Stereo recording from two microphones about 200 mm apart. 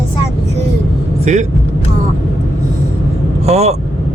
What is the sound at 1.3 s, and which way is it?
Speech, 35° right (ahead or behind).